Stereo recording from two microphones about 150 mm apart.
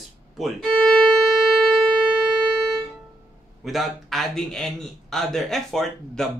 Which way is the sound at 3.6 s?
Centre (ahead or behind).